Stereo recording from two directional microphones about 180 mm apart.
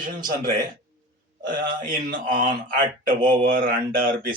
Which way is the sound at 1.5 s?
50° right (ahead or behind).